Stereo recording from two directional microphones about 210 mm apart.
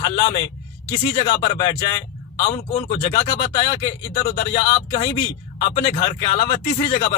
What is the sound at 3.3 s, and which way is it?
Speech, 20° left (ahead or behind).